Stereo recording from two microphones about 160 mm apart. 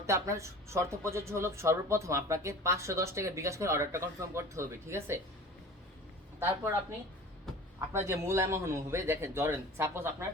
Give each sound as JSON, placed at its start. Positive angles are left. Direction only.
{"t": 0.0, "sound": "speech", "side_deg": -20}
{"t": 7.8, "sound": "speech", "side_deg": -15}